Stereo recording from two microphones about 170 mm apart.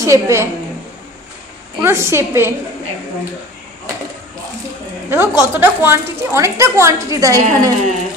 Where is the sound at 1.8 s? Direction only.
15° right (ahead or behind).